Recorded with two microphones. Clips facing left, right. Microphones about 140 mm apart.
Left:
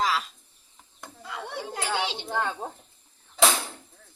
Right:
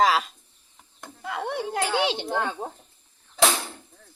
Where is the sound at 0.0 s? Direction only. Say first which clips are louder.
Right 6 dB; 65° right (ahead or behind).